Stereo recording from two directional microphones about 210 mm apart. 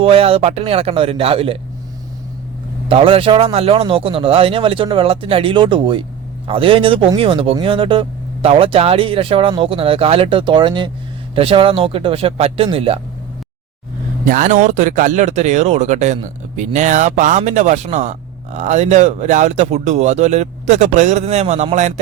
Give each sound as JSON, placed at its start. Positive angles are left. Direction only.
{"t": 0.0, "sound": "speech", "side_deg": -25}
{"t": 2.9, "sound": "speech", "side_deg": -25}
{"t": 14.3, "sound": "speech", "side_deg": -40}